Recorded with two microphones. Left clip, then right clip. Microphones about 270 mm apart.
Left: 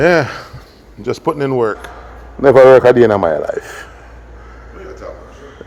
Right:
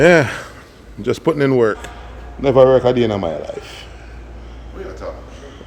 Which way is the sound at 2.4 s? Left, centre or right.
Left.